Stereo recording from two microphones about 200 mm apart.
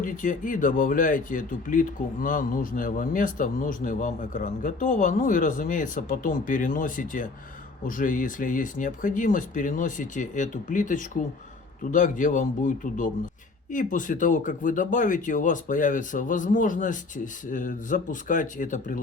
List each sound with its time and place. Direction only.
0.0 s speech: 40° left (ahead or behind)